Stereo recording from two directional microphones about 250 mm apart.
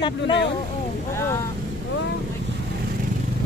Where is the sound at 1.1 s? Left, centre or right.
Centre.